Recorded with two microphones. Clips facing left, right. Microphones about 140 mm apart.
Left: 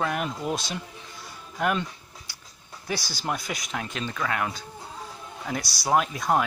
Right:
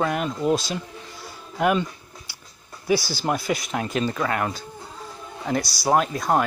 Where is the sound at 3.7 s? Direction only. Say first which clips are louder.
Right 7 dB; 40° right (ahead or behind).